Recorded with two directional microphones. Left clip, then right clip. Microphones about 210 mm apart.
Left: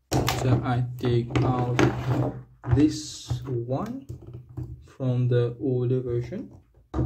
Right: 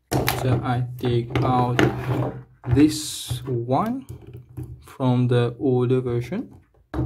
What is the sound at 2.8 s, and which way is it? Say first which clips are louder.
Speech: right 5 dB; 30° right (ahead or behind).